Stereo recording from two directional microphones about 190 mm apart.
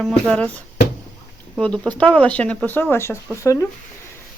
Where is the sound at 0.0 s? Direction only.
5° left (ahead or behind).